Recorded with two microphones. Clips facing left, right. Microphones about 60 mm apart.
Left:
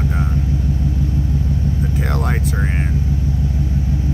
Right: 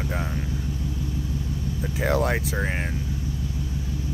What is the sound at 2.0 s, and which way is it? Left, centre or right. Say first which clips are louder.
Speech: right 3 dB; centre.